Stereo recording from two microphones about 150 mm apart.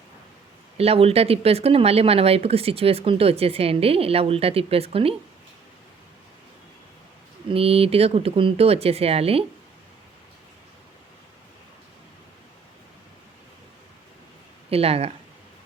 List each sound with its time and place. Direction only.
0.8 s speech: 40° right (ahead or behind)
7.5 s speech: 40° right (ahead or behind)
14.7 s speech: 40° right (ahead or behind)